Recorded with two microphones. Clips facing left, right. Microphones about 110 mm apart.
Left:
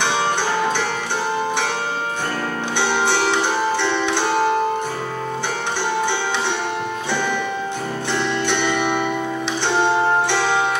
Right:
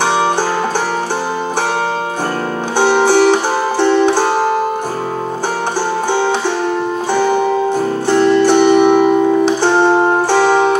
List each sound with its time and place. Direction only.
0.0 s music: 40° right (ahead or behind)
2.8 s music: 40° right (ahead or behind)
7.2 s music: 40° right (ahead or behind)